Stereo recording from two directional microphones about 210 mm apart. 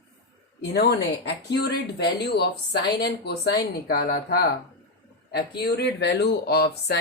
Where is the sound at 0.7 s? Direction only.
50° left (ahead or behind).